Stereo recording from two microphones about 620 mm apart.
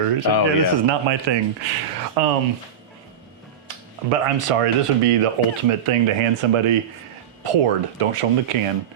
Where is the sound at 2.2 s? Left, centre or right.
Right.